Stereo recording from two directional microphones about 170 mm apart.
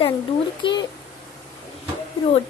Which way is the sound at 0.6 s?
30° left (ahead or behind).